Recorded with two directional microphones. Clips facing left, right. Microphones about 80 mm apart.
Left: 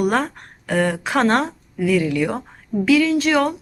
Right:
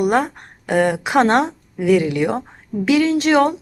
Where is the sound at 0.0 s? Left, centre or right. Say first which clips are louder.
Right 2 dB; centre.